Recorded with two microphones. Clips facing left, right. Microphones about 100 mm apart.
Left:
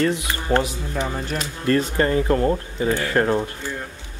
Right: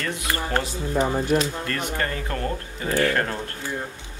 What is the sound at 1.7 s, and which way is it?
Speech, 25° left (ahead or behind).